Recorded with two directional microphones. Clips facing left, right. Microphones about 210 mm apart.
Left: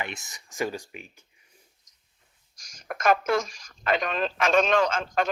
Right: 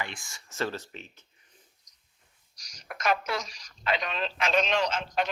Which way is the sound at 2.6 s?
50° left (ahead or behind).